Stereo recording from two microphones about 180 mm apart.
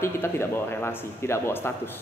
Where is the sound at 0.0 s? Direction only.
15° left (ahead or behind).